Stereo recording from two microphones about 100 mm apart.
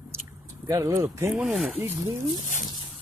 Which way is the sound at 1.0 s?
25° right (ahead or behind).